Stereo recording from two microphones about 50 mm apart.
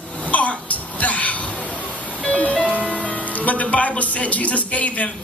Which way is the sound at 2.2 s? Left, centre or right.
Centre.